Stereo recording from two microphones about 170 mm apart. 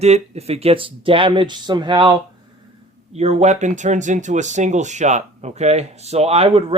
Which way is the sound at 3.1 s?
40° right (ahead or behind).